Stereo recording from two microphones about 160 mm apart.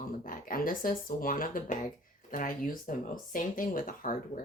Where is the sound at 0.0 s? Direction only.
60° left (ahead or behind).